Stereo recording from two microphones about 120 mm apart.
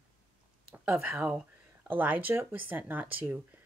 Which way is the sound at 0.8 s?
15° right (ahead or behind).